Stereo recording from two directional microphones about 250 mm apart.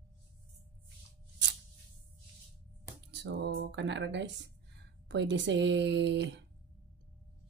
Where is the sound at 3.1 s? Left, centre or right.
Right.